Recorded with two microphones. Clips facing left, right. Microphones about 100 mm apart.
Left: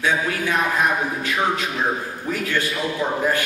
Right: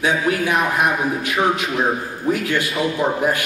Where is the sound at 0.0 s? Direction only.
15° right (ahead or behind).